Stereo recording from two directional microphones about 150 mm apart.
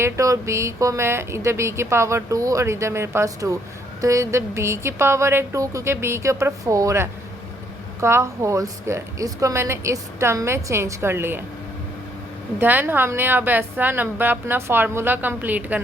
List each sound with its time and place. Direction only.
0.0 s a woman's voice: 20° right (ahead or behind)
12.5 s a woman's voice: 15° right (ahead or behind)